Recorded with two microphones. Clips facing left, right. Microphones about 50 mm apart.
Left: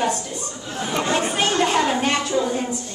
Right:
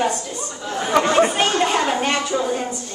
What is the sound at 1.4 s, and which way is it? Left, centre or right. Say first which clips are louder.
Speech: right 1 dB; centre.